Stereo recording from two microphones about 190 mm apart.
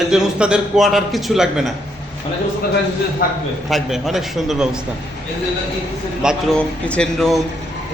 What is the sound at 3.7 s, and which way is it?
A man's voice, centre (ahead or behind).